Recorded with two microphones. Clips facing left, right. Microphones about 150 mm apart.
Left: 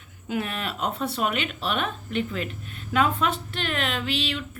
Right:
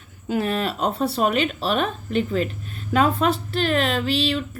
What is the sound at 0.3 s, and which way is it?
Speech, 35° right (ahead or behind).